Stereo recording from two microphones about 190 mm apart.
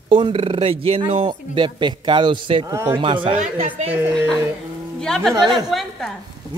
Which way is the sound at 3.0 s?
25° right (ahead or behind).